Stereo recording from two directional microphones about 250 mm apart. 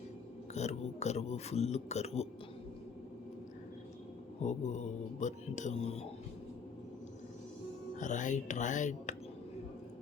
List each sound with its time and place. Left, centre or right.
0.5 s speech: left
4.4 s speech: left
7.9 s speech: left